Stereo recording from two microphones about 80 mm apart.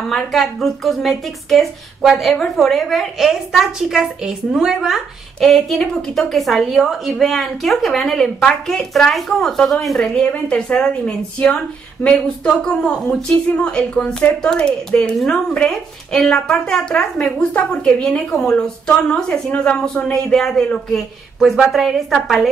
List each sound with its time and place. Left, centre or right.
0.1 s a woman's voice: centre